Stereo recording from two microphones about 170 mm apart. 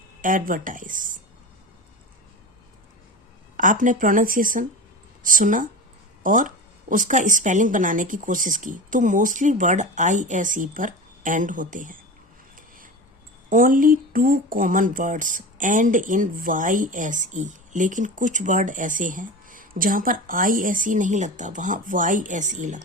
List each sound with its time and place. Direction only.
0.2 s speech: 55° right (ahead or behind)
3.6 s speech: 50° right (ahead or behind)
12.5 s a sound: 55° right (ahead or behind)
13.5 s speech: 55° right (ahead or behind)